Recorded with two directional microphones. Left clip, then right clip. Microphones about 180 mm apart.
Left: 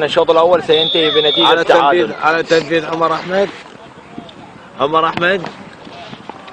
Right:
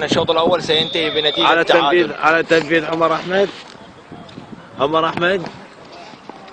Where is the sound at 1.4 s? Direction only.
45° right (ahead or behind).